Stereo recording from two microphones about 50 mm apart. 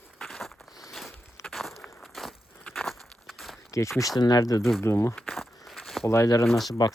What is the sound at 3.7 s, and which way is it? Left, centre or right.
Speech, left.